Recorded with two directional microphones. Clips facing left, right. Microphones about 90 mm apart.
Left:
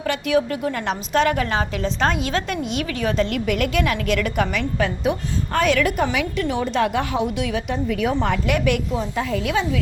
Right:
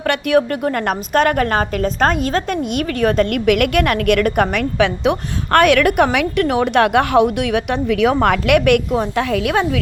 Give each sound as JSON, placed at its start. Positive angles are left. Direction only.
{"t": 0.0, "sound": "a woman's voice", "side_deg": -60}
{"t": 8.2, "sound": "a woman's voice", "side_deg": -75}